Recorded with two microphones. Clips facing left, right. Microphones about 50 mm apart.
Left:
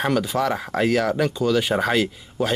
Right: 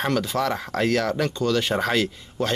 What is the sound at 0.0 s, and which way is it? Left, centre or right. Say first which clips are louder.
Speech: left 2 dB; centre.